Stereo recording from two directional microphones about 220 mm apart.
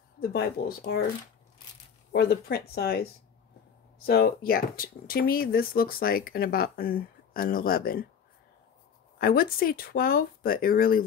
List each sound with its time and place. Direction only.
0.3 s speech: 45° left (ahead or behind)
2.1 s speech: 45° left (ahead or behind)
9.2 s speech: 40° left (ahead or behind)